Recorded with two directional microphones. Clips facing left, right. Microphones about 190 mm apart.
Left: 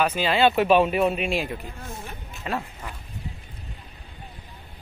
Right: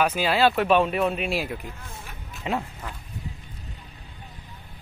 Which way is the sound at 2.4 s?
15° right (ahead or behind).